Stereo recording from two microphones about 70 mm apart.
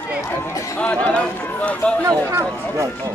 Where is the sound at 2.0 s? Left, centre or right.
Right.